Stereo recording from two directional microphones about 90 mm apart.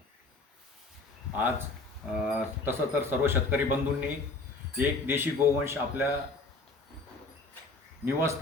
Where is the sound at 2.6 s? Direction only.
25° right (ahead or behind).